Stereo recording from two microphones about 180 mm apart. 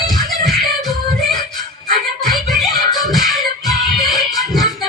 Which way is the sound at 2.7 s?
20° left (ahead or behind).